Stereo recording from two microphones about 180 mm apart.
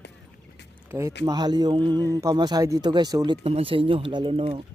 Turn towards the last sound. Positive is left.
turn(degrees=-30)  # may be behind; listen again after turning